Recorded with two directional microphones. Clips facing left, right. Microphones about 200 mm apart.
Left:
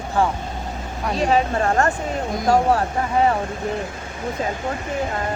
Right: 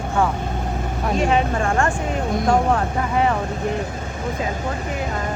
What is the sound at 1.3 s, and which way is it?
Speech, 35° left (ahead or behind).